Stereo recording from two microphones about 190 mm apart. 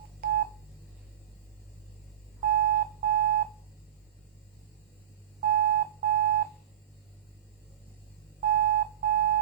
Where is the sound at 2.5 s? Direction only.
50° right (ahead or behind).